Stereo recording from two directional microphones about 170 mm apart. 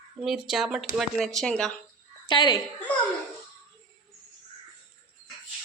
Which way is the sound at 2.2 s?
25° left (ahead or behind).